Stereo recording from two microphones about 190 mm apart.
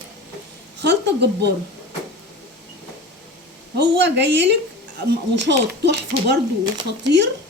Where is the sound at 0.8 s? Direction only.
65° right (ahead or behind).